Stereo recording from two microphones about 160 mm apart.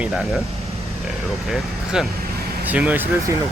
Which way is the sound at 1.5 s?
5° right (ahead or behind).